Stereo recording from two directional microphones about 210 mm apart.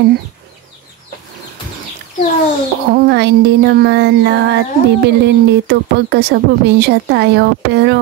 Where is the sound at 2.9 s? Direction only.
50° right (ahead or behind).